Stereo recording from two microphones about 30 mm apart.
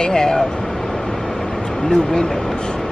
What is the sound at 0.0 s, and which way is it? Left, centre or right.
Speech, left.